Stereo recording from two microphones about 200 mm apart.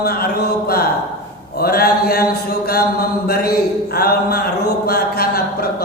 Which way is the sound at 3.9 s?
50° left (ahead or behind).